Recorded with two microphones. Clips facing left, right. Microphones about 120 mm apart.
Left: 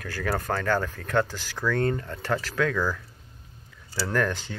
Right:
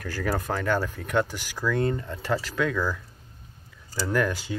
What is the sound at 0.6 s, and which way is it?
Speech, 15° right (ahead or behind).